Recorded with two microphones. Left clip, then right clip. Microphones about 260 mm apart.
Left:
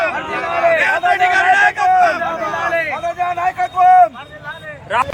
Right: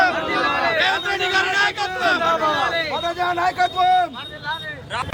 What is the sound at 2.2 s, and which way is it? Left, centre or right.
Speech, right.